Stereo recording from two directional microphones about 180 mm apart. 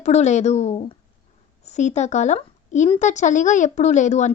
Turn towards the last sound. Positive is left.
turn(degrees=40)  # may be behind; listen again after turning